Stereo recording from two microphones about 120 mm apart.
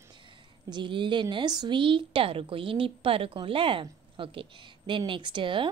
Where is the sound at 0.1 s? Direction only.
40° right (ahead or behind).